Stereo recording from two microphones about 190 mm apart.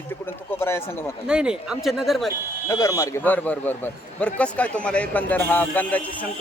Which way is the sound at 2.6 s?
15° left (ahead or behind).